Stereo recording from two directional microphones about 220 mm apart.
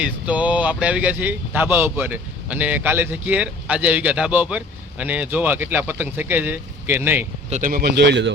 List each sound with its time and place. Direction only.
0.0 s speech: 5° right (ahead or behind)
7.5 s speech: 40° right (ahead or behind)